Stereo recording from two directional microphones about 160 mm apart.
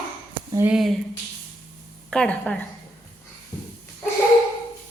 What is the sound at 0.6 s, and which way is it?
Speech, 5° right (ahead or behind).